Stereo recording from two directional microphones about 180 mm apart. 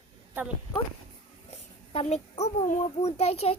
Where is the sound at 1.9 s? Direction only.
35° left (ahead or behind).